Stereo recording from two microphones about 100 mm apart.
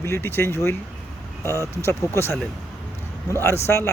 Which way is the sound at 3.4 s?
25° left (ahead or behind).